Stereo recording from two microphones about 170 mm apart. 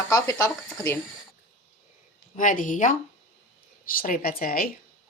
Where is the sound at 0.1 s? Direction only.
20° left (ahead or behind).